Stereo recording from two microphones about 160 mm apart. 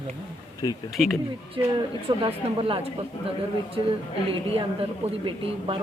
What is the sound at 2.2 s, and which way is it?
Speech, 35° right (ahead or behind).